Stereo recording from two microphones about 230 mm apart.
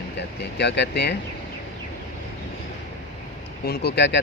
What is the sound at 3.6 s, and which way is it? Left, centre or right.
Speech, left.